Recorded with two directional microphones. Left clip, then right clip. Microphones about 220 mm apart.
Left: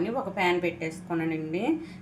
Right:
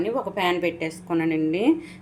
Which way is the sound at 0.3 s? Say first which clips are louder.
Right 1 dB; 35° right (ahead or behind).